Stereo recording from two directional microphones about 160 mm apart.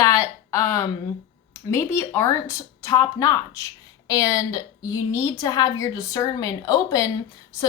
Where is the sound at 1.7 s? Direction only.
15° left (ahead or behind).